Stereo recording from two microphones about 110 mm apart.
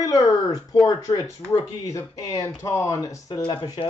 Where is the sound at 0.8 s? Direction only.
35° left (ahead or behind).